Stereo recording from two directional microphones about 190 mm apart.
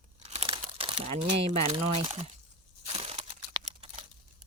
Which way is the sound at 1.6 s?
30° right (ahead or behind).